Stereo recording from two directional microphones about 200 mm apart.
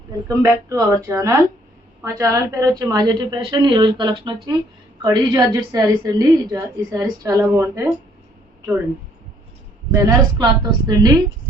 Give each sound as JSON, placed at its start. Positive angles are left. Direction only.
{"t": 0.3, "sound": "a woman's voice", "side_deg": -15}
{"t": 9.9, "sound": "a woman's voice", "side_deg": -20}